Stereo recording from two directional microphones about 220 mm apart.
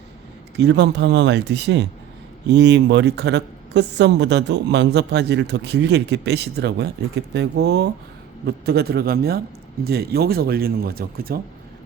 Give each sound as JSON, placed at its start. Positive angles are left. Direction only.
{"t": 0.5, "sound": "a woman's voice", "side_deg": -50}